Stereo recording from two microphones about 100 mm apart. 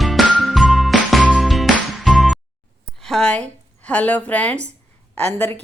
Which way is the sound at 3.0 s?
5° left (ahead or behind).